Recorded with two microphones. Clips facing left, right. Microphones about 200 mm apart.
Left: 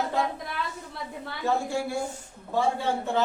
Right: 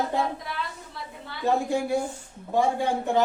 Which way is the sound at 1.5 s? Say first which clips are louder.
Right 3 dB; 20° right (ahead or behind).